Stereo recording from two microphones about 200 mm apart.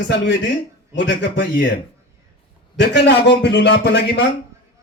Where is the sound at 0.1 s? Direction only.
60° left (ahead or behind).